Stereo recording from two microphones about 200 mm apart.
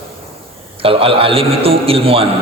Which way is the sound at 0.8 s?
30° right (ahead or behind).